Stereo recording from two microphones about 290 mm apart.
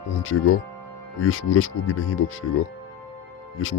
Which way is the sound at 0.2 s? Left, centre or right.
Left.